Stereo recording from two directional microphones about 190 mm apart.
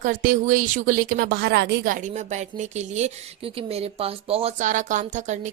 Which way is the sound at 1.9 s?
40° right (ahead or behind).